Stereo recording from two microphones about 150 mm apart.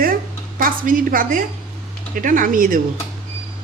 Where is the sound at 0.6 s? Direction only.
65° right (ahead or behind).